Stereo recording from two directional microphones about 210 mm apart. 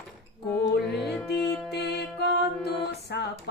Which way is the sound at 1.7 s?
50° left (ahead or behind).